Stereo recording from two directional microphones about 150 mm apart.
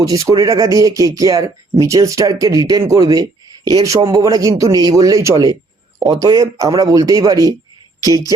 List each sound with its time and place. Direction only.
0.0 s speech: 20° right (ahead or behind)